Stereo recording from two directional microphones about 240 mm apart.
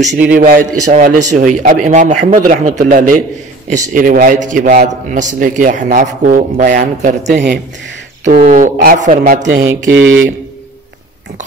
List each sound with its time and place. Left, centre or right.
0.4 s a man's voice: right
9.9 s speech: right